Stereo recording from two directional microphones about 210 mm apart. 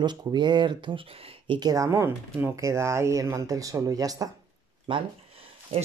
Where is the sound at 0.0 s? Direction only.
20° right (ahead or behind).